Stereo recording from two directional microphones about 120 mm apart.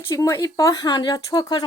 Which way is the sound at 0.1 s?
30° left (ahead or behind).